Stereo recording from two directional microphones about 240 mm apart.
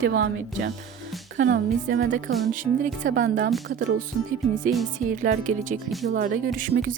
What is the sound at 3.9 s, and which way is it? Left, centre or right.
Speech, right.